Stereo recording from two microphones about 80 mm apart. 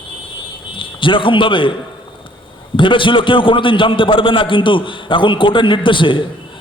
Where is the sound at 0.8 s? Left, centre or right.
Left.